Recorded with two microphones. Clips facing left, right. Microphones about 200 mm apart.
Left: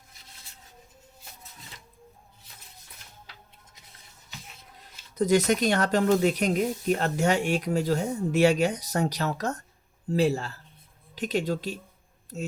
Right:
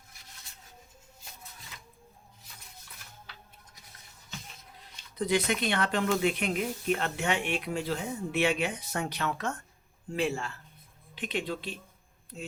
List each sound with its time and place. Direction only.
5.1 s speech: 45° left (ahead or behind)